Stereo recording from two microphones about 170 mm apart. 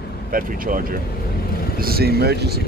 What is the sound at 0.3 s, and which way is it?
Speech, 55° right (ahead or behind).